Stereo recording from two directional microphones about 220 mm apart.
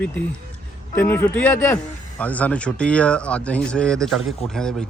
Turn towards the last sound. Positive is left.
turn(degrees=5)  # may be behind; listen again after turning